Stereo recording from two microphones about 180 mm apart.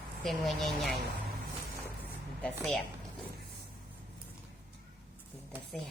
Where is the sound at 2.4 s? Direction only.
5° left (ahead or behind).